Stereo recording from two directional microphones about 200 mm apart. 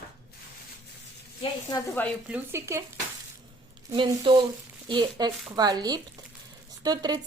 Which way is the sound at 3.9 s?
25° right (ahead or behind).